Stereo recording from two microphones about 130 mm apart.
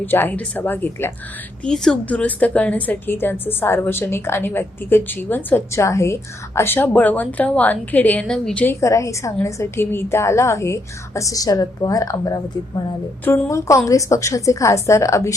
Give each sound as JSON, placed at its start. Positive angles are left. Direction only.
{"t": 0.0, "sound": "a woman's voice", "side_deg": 15}
{"t": 1.6, "sound": "a woman's voice", "side_deg": 5}
{"t": 8.7, "sound": "a woman's voice", "side_deg": 25}